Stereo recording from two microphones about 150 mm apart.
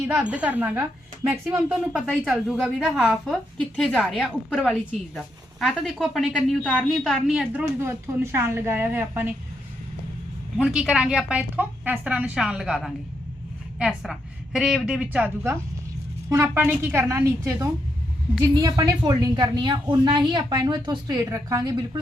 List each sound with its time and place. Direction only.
0.1 s a woman's voice: 10° right (ahead or behind)
7.8 s a woman's voice: 15° right (ahead or behind)
10.6 s a woman's voice: 5° right (ahead or behind); by 21.8 s 25° right (ahead or behind)